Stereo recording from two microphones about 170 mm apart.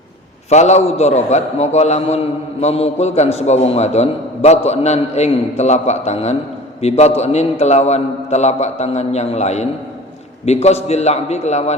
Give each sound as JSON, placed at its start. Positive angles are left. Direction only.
{"t": 0.5, "sound": "a man's voice", "side_deg": 40}